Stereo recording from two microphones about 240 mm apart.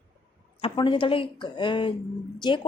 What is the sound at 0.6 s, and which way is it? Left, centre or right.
A woman's voice, centre.